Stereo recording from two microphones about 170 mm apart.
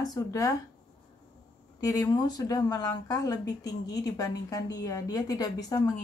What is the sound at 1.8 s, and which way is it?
Speech, 20° left (ahead or behind).